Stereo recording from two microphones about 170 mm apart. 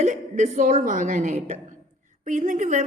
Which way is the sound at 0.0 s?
45° right (ahead or behind).